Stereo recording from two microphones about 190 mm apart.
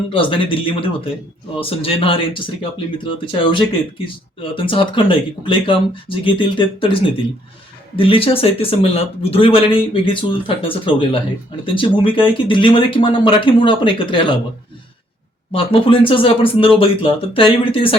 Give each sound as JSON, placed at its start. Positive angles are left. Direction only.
{"t": 0.1, "sound": "speech", "side_deg": 25}
{"t": 15.5, "sound": "speech", "side_deg": 30}